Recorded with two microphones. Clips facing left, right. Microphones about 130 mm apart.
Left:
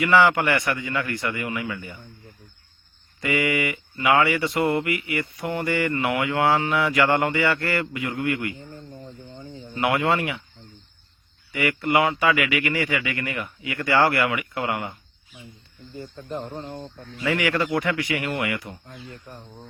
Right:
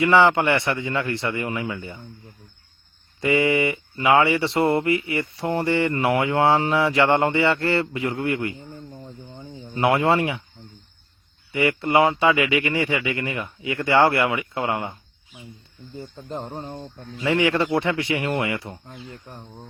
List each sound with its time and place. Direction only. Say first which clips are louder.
0.0 s speech: right 2 dB; 25° right (ahead or behind)
3.2 s speech: right 4 dB; 25° right (ahead or behind)
9.7 s speech: right 3 dB; 30° right (ahead or behind)
11.5 s speech: right 3 dB; 25° right (ahead or behind)
17.2 s speech: right 3 dB; 25° right (ahead or behind)
19.1 s speech: right 1 dB; 15° right (ahead or behind)